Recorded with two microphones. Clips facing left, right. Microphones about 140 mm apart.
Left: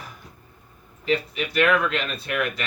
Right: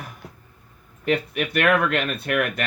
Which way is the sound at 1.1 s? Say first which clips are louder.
Right 2 dB; 60° right (ahead or behind).